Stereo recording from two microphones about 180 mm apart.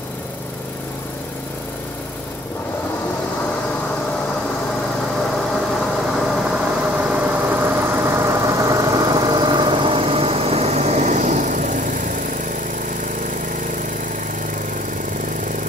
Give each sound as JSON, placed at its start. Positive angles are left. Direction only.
{"t": 6.1, "sound": "vehicle", "side_deg": -5}